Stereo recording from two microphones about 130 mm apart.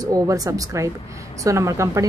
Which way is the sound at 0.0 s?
25° right (ahead or behind).